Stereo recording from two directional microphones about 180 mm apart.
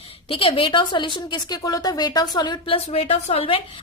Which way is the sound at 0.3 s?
30° left (ahead or behind).